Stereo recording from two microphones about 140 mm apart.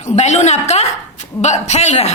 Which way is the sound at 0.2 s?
55° left (ahead or behind).